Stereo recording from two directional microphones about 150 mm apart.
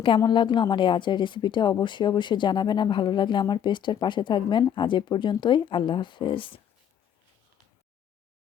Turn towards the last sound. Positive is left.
turn(degrees=35)  # may be behind; listen again after turning